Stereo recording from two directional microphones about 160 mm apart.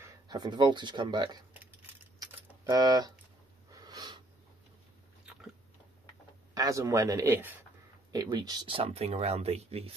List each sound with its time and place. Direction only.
0.0 s speech: 25° right (ahead or behind)
2.1 s a sound: 25° right (ahead or behind)
6.5 s speech: 20° right (ahead or behind)
8.1 s speech: 25° right (ahead or behind)